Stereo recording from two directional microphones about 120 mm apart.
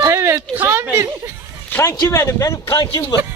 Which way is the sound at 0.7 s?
20° right (ahead or behind).